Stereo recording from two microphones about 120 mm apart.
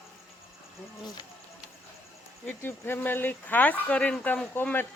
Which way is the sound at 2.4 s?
20° left (ahead or behind).